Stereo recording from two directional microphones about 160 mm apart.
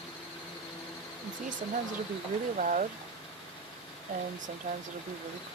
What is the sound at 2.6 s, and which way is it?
Speech, 55° right (ahead or behind).